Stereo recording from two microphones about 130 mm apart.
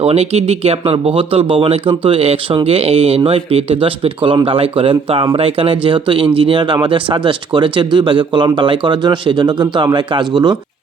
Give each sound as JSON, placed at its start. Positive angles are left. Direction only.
{"t": 0.0, "sound": "speech", "side_deg": -55}